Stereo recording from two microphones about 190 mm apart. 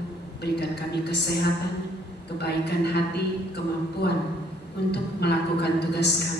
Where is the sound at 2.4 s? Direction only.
60° left (ahead or behind).